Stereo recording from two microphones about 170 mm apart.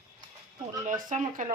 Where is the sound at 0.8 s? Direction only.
50° right (ahead or behind).